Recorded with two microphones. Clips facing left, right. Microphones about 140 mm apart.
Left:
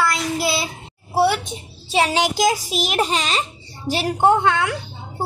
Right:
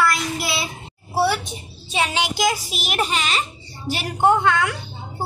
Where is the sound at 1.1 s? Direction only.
20° left (ahead or behind).